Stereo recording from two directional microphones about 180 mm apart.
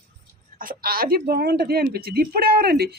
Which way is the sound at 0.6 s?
55° right (ahead or behind).